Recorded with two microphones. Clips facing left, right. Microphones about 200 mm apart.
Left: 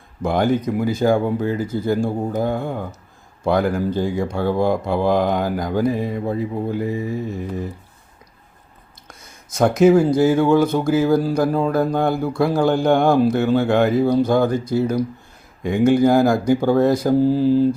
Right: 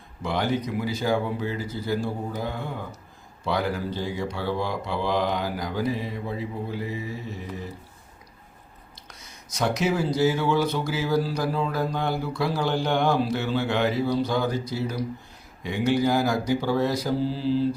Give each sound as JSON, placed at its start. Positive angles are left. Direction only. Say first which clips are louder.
{"t": 0.2, "sound": "speech", "louder": "left 7 dB", "side_deg": 50}
{"t": 9.0, "sound": "speech", "louder": "left 5 dB", "side_deg": 50}